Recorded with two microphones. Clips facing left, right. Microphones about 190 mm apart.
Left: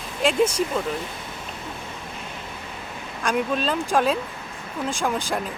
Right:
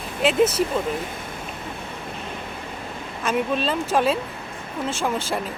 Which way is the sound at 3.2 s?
5° right (ahead or behind).